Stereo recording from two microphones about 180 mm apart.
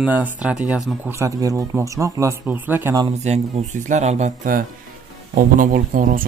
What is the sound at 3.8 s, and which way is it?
Speech, 40° right (ahead or behind).